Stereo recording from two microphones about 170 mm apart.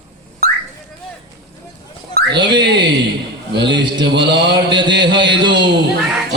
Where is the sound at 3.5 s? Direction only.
90° right.